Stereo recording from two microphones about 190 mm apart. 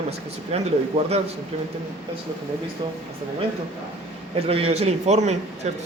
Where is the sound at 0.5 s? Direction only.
35° right (ahead or behind).